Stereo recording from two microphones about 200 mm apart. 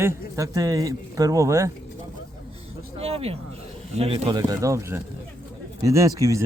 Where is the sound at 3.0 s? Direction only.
30° right (ahead or behind).